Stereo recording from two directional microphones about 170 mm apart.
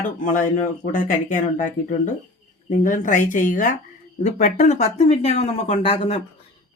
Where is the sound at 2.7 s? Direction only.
45° left (ahead or behind).